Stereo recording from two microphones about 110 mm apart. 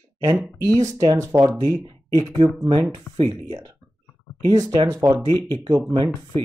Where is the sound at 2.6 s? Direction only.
40° right (ahead or behind).